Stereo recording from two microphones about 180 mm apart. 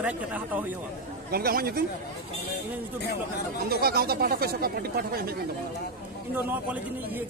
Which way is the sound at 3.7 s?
60° right (ahead or behind).